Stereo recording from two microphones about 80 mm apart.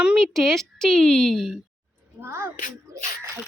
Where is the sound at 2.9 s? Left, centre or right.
Right.